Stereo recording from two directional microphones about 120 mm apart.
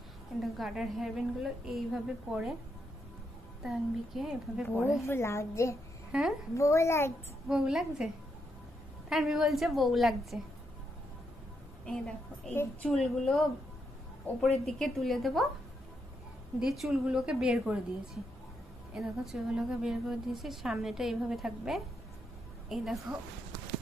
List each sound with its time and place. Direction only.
0.4 s a woman's voice: centre (ahead or behind)
3.6 s a woman's voice: centre (ahead or behind)
5.0 s a woman's voice: 20° left (ahead or behind)
6.1 s a woman's voice: 10° right (ahead or behind)
6.5 s a woman's voice: 25° left (ahead or behind)
7.4 s a woman's voice: 5° right (ahead or behind)
9.1 s a woman's voice: centre (ahead or behind)
11.9 s a woman's voice: 10° left (ahead or behind)
14.6 s a woman's voice: centre (ahead or behind)
16.5 s a woman's voice: 5° right (ahead or behind)